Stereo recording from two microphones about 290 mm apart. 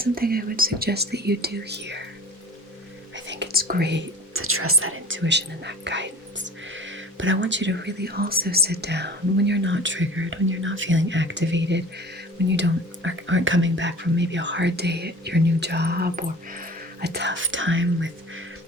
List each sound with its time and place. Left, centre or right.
0.0 s speech: right
3.2 s speech: right